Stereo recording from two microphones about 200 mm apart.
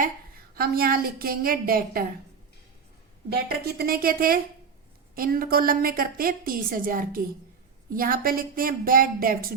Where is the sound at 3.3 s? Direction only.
50° right (ahead or behind).